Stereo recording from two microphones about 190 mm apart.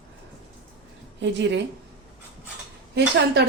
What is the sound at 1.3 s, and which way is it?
Speech, 65° right (ahead or behind).